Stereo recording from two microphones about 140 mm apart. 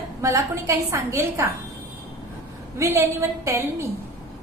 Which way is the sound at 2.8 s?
20° right (ahead or behind).